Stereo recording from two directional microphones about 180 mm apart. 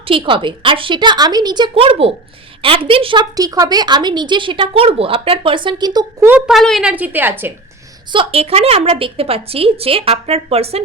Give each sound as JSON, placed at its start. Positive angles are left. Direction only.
{"t": 0.0, "sound": "a woman's voice", "side_deg": -30}
{"t": 6.5, "sound": "a woman's voice", "side_deg": 0}
{"t": 8.1, "sound": "a woman's voice", "side_deg": -30}